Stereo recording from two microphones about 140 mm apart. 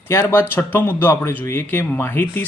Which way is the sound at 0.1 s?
20° left (ahead or behind).